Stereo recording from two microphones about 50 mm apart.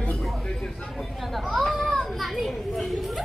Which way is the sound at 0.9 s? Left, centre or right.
Centre.